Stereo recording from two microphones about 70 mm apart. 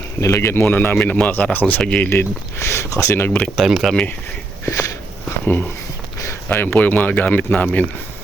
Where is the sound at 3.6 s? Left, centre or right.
Centre.